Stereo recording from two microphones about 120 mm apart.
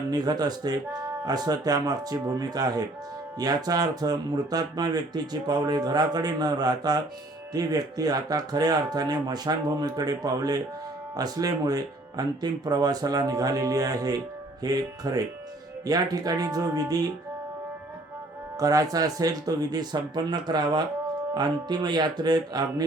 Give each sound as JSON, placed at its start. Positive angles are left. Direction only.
{"t": 0.1, "sound": "speech", "side_deg": -35}
{"t": 18.6, "sound": "speech", "side_deg": -30}